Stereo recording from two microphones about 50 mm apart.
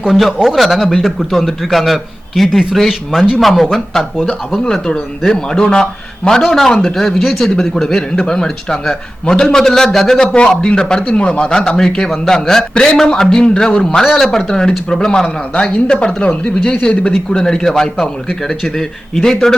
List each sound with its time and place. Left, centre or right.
0.5 s a man's voice: centre
4.6 s a man's voice: centre
10.3 s a man's voice: centre
14.0 s a man's voice: centre; by 17.1 s left
17.1 s a man's voice: centre